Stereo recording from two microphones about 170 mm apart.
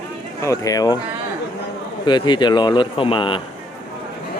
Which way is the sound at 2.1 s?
25° left (ahead or behind).